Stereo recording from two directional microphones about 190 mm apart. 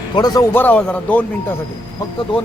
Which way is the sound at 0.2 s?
20° left (ahead or behind).